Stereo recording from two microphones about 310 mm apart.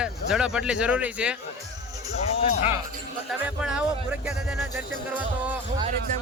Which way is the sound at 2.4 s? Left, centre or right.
Left.